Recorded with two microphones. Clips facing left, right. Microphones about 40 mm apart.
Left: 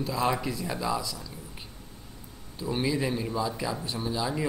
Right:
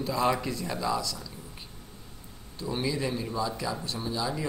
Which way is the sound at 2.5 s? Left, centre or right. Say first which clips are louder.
Left 2 dB; centre.